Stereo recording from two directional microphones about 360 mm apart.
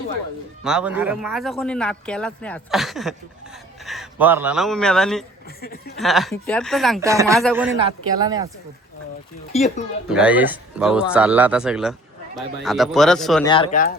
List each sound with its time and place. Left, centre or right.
0.6 s a man's voice: centre
5.5 s speech: left
6.0 s a man's voice: centre
9.5 s speech: centre
10.1 s a man's voice: centre
13.5 s speech: centre